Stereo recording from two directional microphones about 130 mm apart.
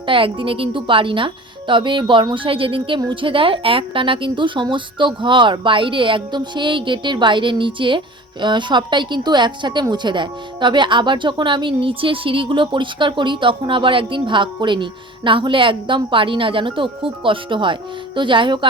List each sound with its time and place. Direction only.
0.0 s a woman's voice: 40° right (ahead or behind)